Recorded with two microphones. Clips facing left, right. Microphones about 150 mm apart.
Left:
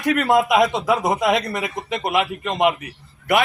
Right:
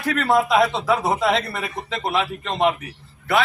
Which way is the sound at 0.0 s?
15° left (ahead or behind).